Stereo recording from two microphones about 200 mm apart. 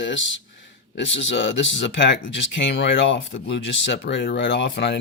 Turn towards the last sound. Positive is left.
turn(degrees=60)  # may be behind; listen again after turning